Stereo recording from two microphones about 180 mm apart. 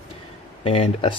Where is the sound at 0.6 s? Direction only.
30° left (ahead or behind).